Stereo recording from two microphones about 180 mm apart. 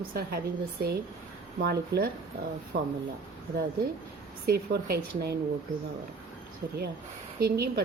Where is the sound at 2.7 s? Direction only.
90° right.